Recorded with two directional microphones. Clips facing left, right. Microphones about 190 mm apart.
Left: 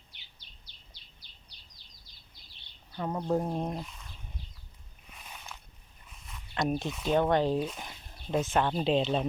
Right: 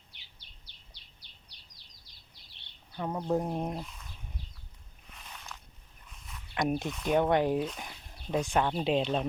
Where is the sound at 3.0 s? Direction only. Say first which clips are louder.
Left 1 dB; centre (ahead or behind).